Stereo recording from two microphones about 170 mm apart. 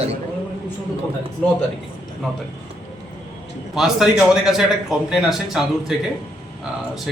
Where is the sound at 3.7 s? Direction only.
Centre (ahead or behind).